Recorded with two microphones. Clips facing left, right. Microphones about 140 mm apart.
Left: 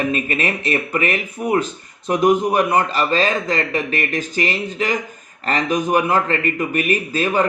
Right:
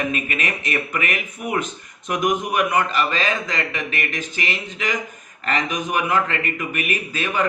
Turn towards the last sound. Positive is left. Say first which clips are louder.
# left 5 dB
turn(degrees=35)  # may be behind; listen again after turning